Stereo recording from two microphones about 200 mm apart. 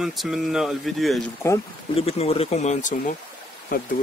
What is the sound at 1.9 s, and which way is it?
Speech, 30° left (ahead or behind).